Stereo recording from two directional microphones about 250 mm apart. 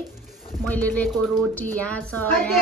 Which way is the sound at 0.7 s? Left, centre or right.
Centre.